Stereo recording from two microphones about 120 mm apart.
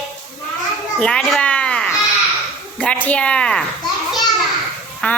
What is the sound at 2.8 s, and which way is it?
Speech, 10° left (ahead or behind).